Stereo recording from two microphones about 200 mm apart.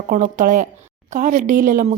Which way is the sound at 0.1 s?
40° right (ahead or behind).